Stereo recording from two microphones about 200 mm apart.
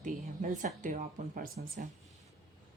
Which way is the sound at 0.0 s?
40° right (ahead or behind).